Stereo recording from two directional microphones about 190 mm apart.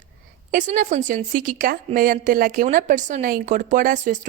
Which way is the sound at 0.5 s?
45° right (ahead or behind).